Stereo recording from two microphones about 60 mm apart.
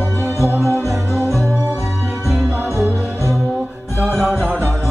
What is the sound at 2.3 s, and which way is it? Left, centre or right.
Music, centre.